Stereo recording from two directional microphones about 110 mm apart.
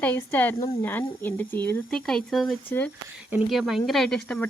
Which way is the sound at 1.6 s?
5° left (ahead or behind).